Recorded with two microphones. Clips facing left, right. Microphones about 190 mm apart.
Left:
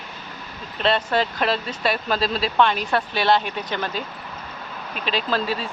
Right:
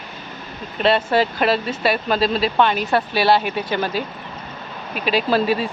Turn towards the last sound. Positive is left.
turn(degrees=-15)  # may be behind; listen again after turning